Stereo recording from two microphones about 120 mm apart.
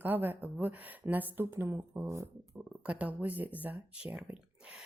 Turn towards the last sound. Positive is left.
turn(degrees=-10)  # may be behind; listen again after turning